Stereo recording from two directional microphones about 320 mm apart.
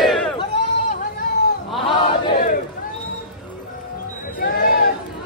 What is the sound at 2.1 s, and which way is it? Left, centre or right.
Crowd, left.